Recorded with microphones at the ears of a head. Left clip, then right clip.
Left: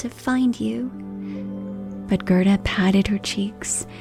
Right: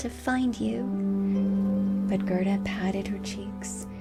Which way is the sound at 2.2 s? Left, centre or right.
Left.